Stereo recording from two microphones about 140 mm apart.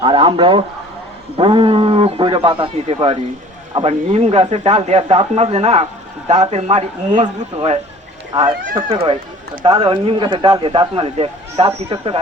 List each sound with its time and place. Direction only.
0.0 s a man's voice: 35° right (ahead or behind)
7.5 s a man's voice: 40° right (ahead or behind)